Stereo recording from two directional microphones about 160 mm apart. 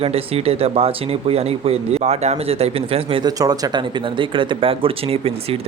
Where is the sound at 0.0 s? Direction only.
40° right (ahead or behind).